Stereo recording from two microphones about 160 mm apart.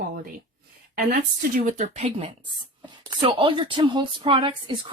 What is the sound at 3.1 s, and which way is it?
Speech, 30° right (ahead or behind).